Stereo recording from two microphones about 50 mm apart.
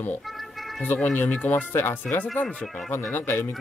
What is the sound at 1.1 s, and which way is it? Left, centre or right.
Speech, left.